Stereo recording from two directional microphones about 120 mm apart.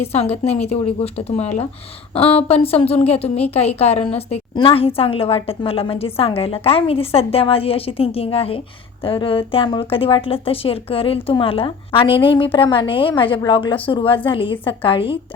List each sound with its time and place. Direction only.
0.1 s a woman's voice: 60° left (ahead or behind)
4.5 s a woman's voice: 50° left (ahead or behind)